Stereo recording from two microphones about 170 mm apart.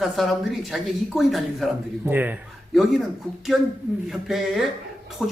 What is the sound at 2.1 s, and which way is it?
Speech, 10° right (ahead or behind).